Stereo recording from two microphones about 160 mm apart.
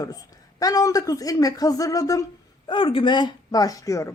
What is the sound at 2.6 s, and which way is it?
Speech, 30° left (ahead or behind).